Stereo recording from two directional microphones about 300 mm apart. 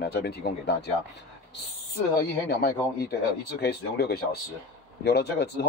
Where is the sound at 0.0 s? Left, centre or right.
Left.